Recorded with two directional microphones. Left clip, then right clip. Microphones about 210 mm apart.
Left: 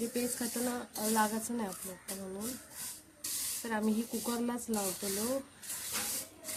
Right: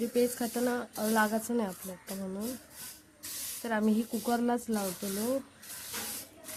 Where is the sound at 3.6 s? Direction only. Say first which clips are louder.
Right 5 dB; 35° right (ahead or behind).